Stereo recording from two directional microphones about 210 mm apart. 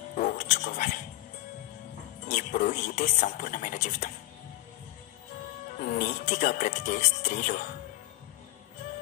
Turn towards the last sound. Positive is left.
turn(degrees=40)  # may be behind; listen again after turning